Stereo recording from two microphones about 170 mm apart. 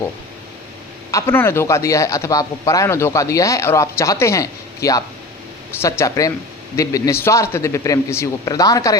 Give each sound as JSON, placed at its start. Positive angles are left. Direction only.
{"t": 1.1, "sound": "speech", "side_deg": 15}